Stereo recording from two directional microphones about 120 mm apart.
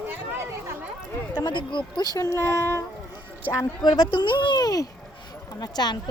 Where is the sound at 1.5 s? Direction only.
40° left (ahead or behind).